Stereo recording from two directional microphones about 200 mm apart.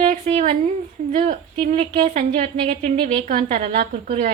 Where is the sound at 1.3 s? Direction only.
30° right (ahead or behind).